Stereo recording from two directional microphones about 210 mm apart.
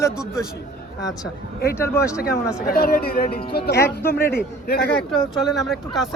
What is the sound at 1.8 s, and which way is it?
Speech, 15° left (ahead or behind).